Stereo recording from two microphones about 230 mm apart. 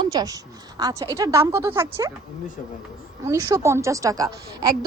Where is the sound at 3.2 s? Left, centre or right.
Centre.